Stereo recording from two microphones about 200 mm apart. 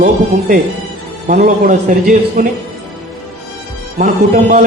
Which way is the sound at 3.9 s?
40° right (ahead or behind).